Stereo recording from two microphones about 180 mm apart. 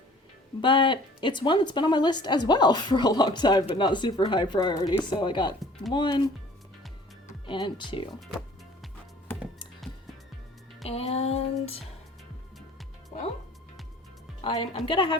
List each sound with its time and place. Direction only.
0.6 s speech: 25° left (ahead or behind)
7.4 s speech: 25° left (ahead or behind)
10.8 s a sound: 35° left (ahead or behind)
14.4 s speech: 30° left (ahead or behind)